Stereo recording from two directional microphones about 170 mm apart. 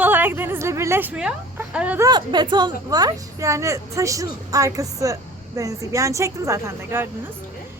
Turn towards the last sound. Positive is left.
turn(degrees=-15)  # may be behind; listen again after turning